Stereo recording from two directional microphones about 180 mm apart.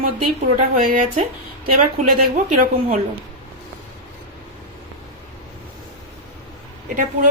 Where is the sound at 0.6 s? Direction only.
45° right (ahead or behind).